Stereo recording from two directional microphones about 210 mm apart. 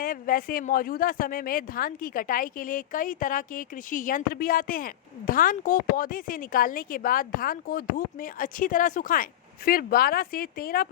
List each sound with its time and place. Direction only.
0.0 s speech: 40° left (ahead or behind)